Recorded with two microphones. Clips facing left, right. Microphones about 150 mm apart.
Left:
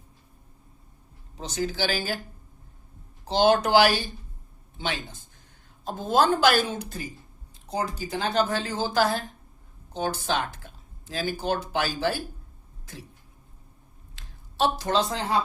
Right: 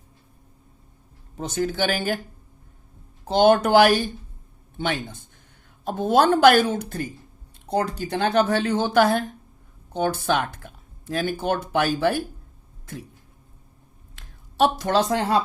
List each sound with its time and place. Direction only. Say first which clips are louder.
1.4 s speech: right 4 dB; 55° right (ahead or behind)
3.2 s speech: right 4 dB; 55° right (ahead or behind)
14.2 s speech: right 5 dB; 60° right (ahead or behind)